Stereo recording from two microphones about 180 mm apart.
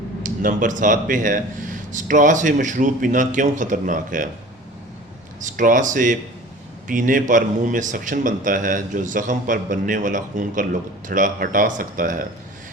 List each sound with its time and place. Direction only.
0.2 s speech: 45° right (ahead or behind)
5.4 s speech: 45° right (ahead or behind)